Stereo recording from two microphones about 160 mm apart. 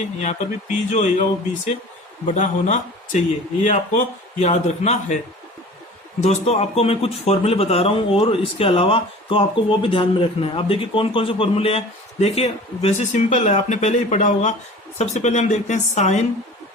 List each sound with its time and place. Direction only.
0.0 s speech: 45° left (ahead or behind)
6.2 s a man's voice: 40° left (ahead or behind)